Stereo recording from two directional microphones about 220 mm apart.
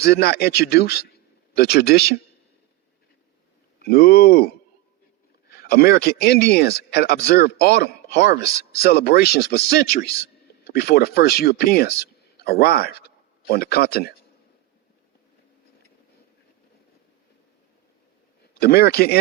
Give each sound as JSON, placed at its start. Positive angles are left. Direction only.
{"t": 0.0, "sound": "speech", "side_deg": 45}
{"t": 3.8, "sound": "speech", "side_deg": 45}
{"t": 5.5, "sound": "speech", "side_deg": 45}
{"t": 18.6, "sound": "speech", "side_deg": 45}